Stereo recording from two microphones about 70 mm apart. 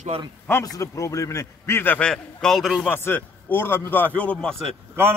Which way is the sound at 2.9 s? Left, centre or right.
Left.